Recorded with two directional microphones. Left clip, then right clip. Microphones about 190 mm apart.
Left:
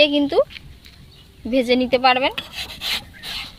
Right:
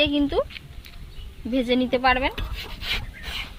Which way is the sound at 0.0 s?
50° left (ahead or behind).